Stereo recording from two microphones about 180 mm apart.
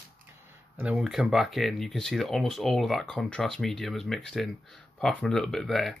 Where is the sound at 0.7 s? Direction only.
5° right (ahead or behind).